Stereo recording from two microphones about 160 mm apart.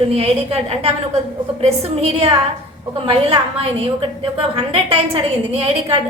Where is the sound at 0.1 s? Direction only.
40° right (ahead or behind).